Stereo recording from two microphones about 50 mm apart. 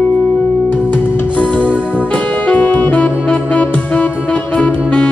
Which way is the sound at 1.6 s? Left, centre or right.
Right.